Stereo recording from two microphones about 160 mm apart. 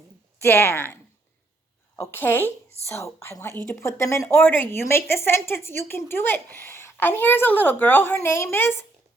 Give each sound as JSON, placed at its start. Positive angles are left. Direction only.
{"t": 0.4, "sound": "a woman's voice", "side_deg": 15}
{"t": 2.0, "sound": "a woman's voice", "side_deg": 10}